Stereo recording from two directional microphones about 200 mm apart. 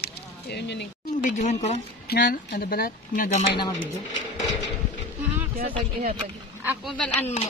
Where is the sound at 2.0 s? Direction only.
45° left (ahead or behind).